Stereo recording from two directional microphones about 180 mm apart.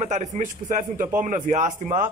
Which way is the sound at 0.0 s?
40° right (ahead or behind).